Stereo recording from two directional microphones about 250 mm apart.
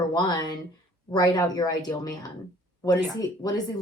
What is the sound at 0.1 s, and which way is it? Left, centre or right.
Speech, centre.